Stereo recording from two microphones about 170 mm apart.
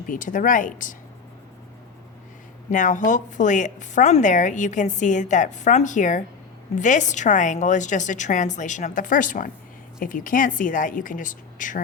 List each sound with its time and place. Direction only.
0.1 s a woman's voice: 50° left (ahead or behind)
2.6 s a woman's voice: 50° left (ahead or behind)